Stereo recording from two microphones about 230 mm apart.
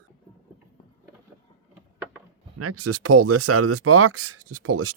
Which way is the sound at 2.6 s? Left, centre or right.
Right.